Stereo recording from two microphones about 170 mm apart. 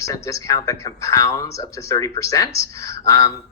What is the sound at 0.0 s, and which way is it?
A man's voice, 20° left (ahead or behind).